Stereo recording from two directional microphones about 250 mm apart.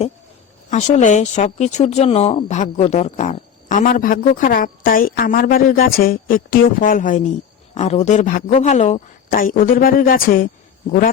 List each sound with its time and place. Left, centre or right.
0.7 s speech: left